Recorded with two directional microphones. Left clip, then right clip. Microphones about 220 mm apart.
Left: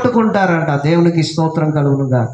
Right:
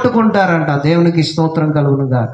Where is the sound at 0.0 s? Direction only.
40° right (ahead or behind).